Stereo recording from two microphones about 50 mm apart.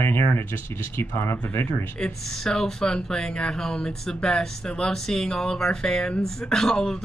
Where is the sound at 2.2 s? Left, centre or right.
Centre.